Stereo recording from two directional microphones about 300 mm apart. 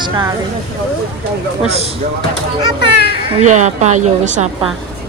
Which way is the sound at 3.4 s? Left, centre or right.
Right.